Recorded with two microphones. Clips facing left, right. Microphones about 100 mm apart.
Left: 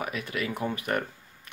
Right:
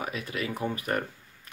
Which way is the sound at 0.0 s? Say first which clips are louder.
Left 1 dB; 30° right (ahead or behind).